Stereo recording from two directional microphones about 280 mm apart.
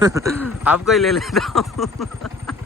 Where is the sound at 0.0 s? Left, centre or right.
Centre.